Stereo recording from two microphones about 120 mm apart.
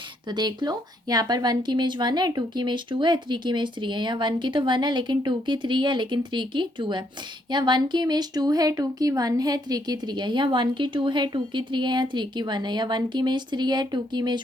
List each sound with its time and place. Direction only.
0.3 s speech: 35° right (ahead or behind)